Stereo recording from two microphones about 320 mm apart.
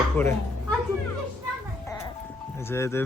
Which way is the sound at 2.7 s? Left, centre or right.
Centre.